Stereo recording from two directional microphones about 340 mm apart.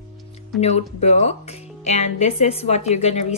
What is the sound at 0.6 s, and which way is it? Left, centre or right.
A woman's voice, centre.